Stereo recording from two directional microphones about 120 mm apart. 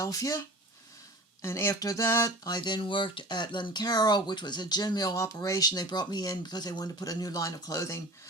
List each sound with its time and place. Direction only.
0.0 s speech: 30° left (ahead or behind)